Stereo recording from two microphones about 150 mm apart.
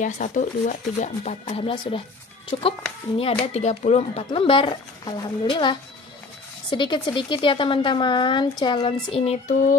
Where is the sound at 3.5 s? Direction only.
50° left (ahead or behind).